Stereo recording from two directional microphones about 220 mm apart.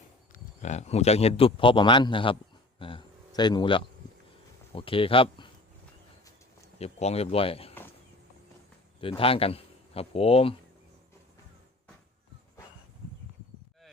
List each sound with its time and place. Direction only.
0.3 s a man's voice: 30° left (ahead or behind)
6.7 s speech: 30° left (ahead or behind)
9.0 s a man's voice: 25° left (ahead or behind)